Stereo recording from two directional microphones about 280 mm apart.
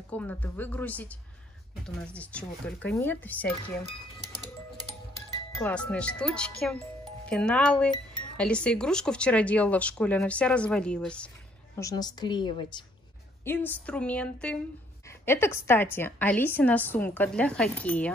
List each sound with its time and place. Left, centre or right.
0.1 s speech: centre
2.1 s speech: centre
5.6 s a woman's voice: centre